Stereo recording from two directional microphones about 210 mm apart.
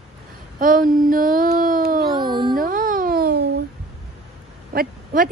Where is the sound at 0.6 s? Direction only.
40° right (ahead or behind).